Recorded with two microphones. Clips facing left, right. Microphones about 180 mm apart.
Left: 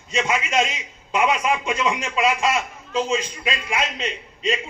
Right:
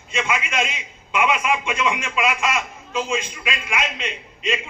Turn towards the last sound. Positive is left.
turn(degrees=35)  # may be behind; listen again after turning